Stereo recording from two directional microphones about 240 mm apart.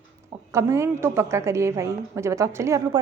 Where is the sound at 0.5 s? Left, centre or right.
Centre.